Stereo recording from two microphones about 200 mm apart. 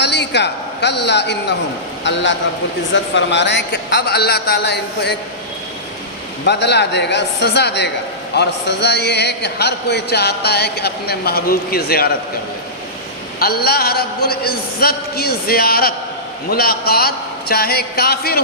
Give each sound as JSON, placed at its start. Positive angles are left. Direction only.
{"t": 0.0, "sound": "a man's voice", "side_deg": 60}
{"t": 6.4, "sound": "a man's voice", "side_deg": 55}
{"t": 13.4, "sound": "speech", "side_deg": 50}